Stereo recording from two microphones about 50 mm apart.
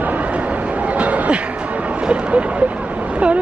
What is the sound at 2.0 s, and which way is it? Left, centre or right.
Speech, right.